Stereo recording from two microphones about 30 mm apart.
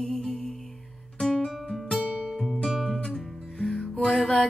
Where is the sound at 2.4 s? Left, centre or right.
Centre.